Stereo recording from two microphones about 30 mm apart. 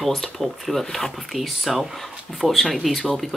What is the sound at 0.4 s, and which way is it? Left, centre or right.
Speech, centre.